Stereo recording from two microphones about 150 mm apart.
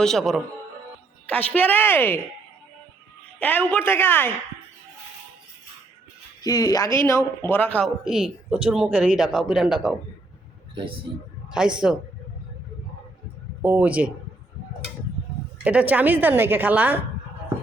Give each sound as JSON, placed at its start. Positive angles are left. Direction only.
{"t": 0.0, "sound": "a woman's voice", "side_deg": 0}
{"t": 3.4, "sound": "a woman's voice", "side_deg": 10}
{"t": 6.4, "sound": "a woman's voice", "side_deg": 25}
{"t": 8.0, "sound": "speech", "side_deg": -5}
{"t": 10.8, "sound": "a man's voice", "side_deg": -35}
{"t": 11.5, "sound": "speech", "side_deg": -5}
{"t": 13.6, "sound": "a woman's voice", "side_deg": -10}
{"t": 15.6, "sound": "a woman's voice", "side_deg": -10}